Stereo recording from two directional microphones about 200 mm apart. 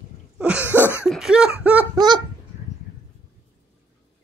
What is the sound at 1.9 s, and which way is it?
Honk, 20° right (ahead or behind).